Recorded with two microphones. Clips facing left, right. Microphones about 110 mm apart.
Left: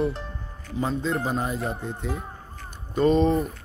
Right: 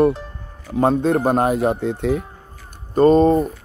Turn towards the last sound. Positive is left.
turn(degrees=-40)  # may be behind; listen again after turning